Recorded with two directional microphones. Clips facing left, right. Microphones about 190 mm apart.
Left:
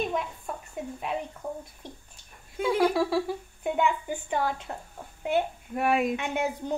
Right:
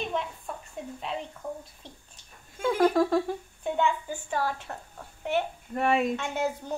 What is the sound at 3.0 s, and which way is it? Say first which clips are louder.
A woman's voice: right 2 dB; 5° left (ahead or behind).